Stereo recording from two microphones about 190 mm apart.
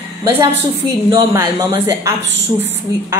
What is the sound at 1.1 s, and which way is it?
Speech, 25° right (ahead or behind).